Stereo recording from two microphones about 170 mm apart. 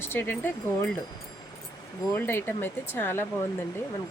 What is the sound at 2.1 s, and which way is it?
Speech, 10° left (ahead or behind).